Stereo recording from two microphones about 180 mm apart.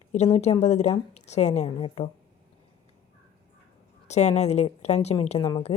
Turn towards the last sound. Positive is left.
turn(degrees=40)  # may be behind; listen again after turning